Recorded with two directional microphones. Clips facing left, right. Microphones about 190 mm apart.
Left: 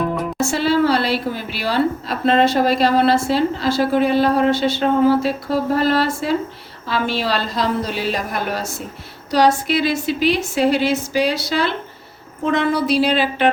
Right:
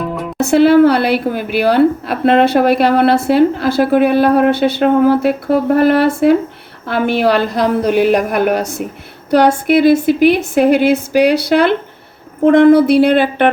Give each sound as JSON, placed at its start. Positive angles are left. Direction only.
{"t": 0.0, "sound": "music", "side_deg": 0}
{"t": 0.3, "sound": "a woman's voice", "side_deg": -60}